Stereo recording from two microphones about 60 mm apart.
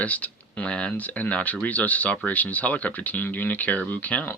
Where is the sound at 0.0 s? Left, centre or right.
Left.